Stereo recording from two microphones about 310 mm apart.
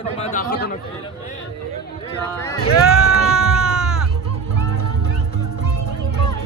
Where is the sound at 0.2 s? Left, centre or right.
Left.